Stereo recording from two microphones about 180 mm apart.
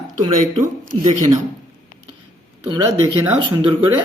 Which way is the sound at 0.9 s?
45° right (ahead or behind).